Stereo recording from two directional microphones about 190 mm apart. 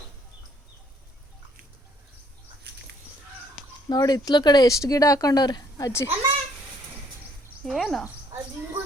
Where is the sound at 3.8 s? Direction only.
20° left (ahead or behind).